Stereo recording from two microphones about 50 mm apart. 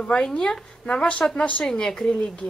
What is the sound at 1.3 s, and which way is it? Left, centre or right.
Speech, left.